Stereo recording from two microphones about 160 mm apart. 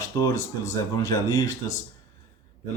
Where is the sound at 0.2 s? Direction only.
20° left (ahead or behind).